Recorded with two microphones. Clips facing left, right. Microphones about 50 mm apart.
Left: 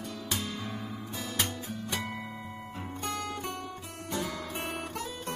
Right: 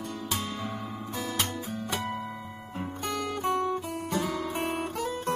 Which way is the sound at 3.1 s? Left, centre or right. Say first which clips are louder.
Right 7 dB; centre.